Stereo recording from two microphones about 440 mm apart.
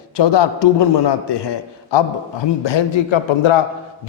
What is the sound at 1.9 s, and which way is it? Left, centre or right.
A man's voice, left.